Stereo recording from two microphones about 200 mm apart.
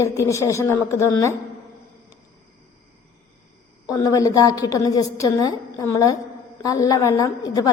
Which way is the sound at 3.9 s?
15° left (ahead or behind).